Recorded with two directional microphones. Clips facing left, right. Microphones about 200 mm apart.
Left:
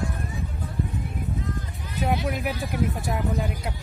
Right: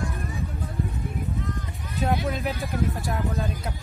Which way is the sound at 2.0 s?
15° left (ahead or behind).